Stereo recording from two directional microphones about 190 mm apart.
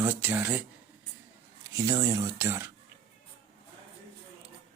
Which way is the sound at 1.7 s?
15° right (ahead or behind).